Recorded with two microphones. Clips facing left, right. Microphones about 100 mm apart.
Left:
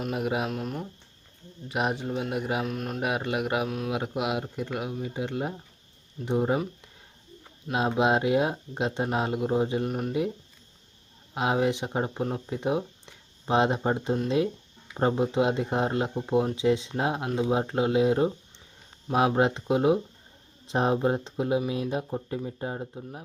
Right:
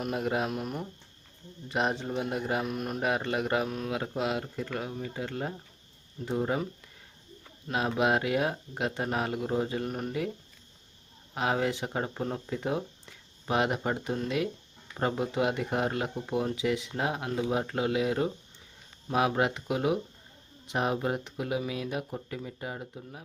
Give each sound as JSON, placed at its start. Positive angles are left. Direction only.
{"t": 0.0, "sound": "speech", "side_deg": 5}
{"t": 11.3, "sound": "speech", "side_deg": 20}